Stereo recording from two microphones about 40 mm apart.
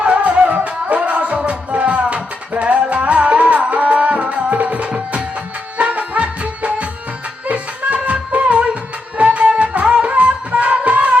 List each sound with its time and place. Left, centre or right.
0.0 s music: right